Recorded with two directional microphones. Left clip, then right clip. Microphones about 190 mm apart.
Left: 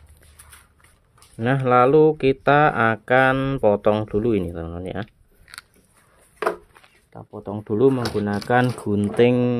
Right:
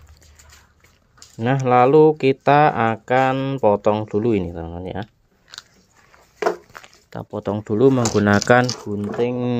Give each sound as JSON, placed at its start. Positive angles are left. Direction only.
{"t": 1.3, "sound": "speech", "side_deg": 0}
{"t": 6.7, "sound": "a sound", "side_deg": -40}
{"t": 7.5, "sound": "speech", "side_deg": -10}
{"t": 8.0, "sound": "speech", "side_deg": -40}
{"t": 8.8, "sound": "speech", "side_deg": 25}